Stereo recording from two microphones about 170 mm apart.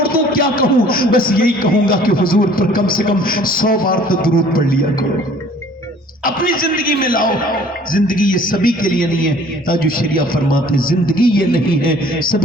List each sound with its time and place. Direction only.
0.0 s a man's voice: 60° left (ahead or behind)
6.2 s a man's voice: 55° left (ahead or behind)